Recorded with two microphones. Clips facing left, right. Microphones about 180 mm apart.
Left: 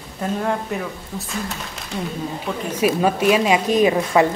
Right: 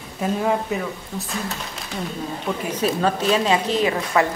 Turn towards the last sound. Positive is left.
turn(degrees=20)  # may be behind; listen again after turning